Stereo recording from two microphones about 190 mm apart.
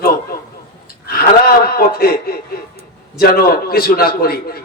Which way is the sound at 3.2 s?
50° left (ahead or behind).